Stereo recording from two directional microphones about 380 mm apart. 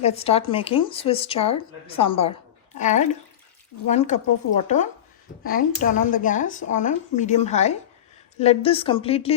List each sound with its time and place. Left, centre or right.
0.0 s a woman's voice: centre